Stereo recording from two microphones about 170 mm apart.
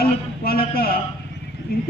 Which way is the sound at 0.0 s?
60° left (ahead or behind).